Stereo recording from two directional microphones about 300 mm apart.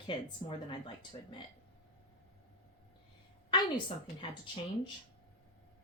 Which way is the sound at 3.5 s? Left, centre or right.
Centre.